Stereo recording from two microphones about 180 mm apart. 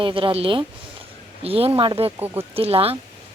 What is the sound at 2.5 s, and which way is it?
Speech, 30° right (ahead or behind).